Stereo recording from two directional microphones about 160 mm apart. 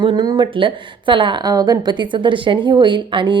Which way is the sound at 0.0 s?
30° right (ahead or behind).